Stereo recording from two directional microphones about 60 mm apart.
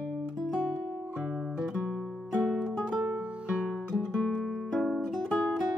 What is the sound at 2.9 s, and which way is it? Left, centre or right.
Music, right.